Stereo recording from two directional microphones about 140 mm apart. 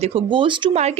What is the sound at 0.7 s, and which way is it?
Speech, 50° right (ahead or behind).